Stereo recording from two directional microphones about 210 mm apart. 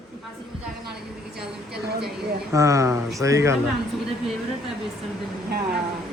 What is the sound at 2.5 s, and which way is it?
A man's voice, 15° right (ahead or behind).